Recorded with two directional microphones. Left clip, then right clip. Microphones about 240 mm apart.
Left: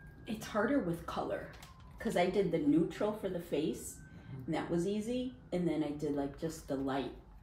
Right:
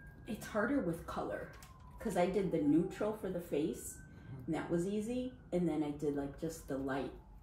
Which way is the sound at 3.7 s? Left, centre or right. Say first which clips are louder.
Left 2 dB; centre.